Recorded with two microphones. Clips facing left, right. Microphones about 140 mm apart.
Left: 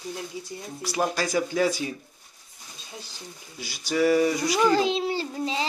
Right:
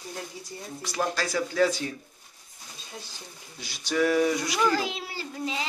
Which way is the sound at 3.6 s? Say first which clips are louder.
Left 2 dB; 5° left (ahead or behind).